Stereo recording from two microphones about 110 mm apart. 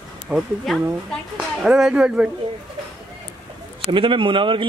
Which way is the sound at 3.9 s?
50° right (ahead or behind).